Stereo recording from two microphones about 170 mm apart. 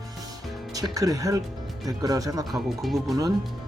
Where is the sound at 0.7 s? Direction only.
20° right (ahead or behind).